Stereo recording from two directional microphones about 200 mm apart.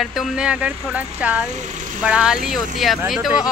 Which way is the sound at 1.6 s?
40° right (ahead or behind).